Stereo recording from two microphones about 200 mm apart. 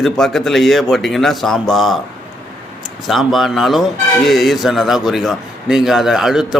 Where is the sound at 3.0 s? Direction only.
Centre (ahead or behind).